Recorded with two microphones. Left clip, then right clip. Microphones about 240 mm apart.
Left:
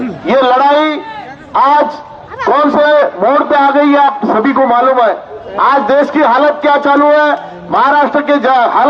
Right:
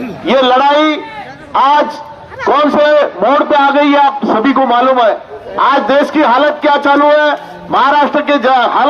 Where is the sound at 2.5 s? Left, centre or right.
Right.